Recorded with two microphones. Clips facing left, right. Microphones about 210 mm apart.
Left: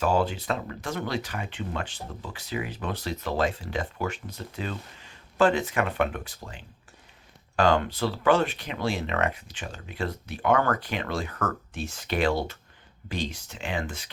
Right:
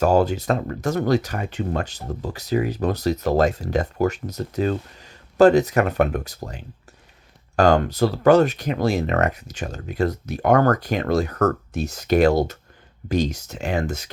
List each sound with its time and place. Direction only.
0.0 s speech: 40° right (ahead or behind)